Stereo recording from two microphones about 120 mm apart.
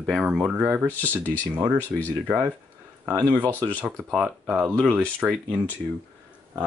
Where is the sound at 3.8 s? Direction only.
Centre (ahead or behind).